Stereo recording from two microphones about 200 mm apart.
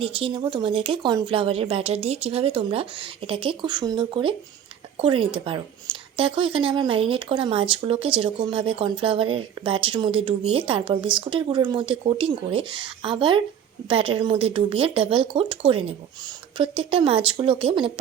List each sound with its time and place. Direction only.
0.0 s speech: 25° right (ahead or behind)